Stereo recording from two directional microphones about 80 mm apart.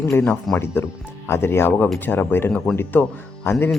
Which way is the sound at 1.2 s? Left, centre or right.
Left.